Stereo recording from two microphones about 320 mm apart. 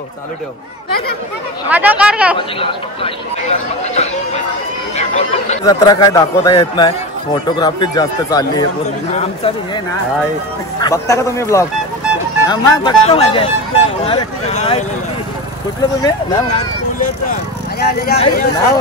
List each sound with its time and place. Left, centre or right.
1.7 s speech: centre
2.3 s speech: centre
10.8 s speech: centre
16.0 s speech: centre
17.7 s speech: left